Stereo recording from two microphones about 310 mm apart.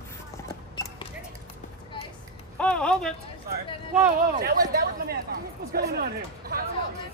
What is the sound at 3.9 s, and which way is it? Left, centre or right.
Speech, right.